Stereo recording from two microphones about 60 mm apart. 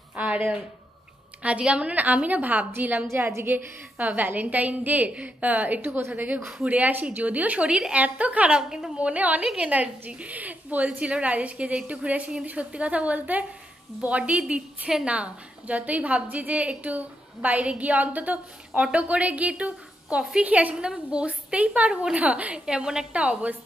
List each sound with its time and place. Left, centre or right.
0.1 s a sound: right
1.4 s a woman's voice: right
3.1 s a woman's voice: right
3.4 s a woman's voice: right
5.9 s a woman's voice: right
6.2 s a woman's voice: right
8.5 s a woman's voice: centre
8.9 s a woman's voice: right
9.4 s a woman's voice: centre
9.7 s a woman's voice: right